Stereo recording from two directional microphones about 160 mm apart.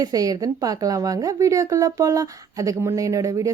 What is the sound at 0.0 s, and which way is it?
A woman's voice, 25° right (ahead or behind).